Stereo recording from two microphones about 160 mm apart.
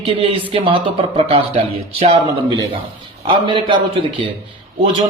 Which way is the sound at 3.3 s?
30° right (ahead or behind).